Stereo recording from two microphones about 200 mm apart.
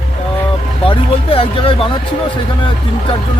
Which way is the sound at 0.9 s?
25° left (ahead or behind).